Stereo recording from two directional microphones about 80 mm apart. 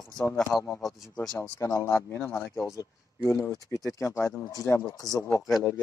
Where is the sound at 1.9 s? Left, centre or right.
Left.